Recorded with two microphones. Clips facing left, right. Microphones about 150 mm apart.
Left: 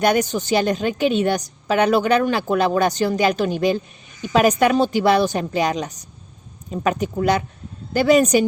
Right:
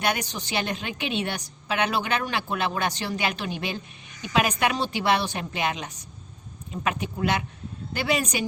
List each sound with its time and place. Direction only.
0.0 s a woman's voice: 45° left (ahead or behind)